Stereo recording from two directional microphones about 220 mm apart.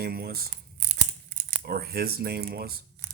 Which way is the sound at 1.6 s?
45° right (ahead or behind).